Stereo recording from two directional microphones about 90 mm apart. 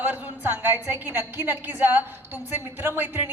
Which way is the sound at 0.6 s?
25° right (ahead or behind).